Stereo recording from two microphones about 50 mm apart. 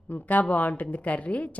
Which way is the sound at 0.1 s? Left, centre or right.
Left.